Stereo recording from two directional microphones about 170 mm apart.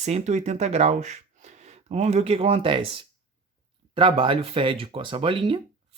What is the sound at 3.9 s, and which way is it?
Speech, 30° right (ahead or behind).